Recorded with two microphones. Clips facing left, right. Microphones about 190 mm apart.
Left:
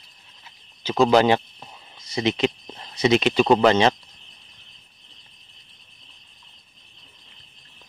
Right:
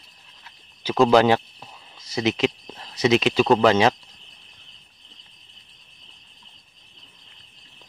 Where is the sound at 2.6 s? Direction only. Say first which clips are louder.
Even; 10° left (ahead or behind).